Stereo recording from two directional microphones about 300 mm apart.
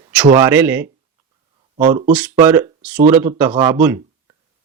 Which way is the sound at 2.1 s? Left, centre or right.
Centre.